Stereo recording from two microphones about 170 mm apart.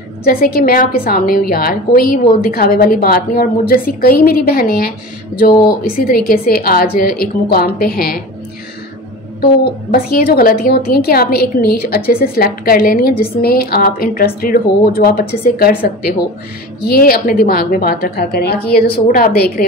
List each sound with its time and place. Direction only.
0.2 s a woman's voice: 60° left (ahead or behind)
9.4 s a woman's voice: 65° left (ahead or behind)